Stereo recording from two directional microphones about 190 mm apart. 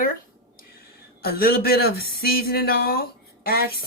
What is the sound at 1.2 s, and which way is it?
Speech, 55° left (ahead or behind).